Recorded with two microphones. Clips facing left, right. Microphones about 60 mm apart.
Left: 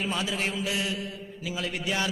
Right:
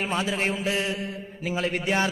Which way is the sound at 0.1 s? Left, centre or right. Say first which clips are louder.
Right 4 dB; right.